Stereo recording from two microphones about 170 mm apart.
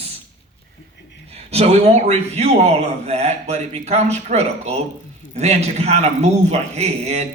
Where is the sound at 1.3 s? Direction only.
40° right (ahead or behind).